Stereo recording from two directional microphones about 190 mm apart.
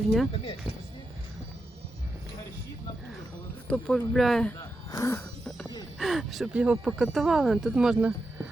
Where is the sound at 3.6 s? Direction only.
5° left (ahead or behind).